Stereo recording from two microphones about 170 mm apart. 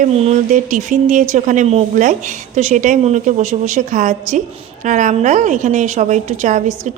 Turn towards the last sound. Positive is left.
turn(degrees=-45)  # may be behind; listen again after turning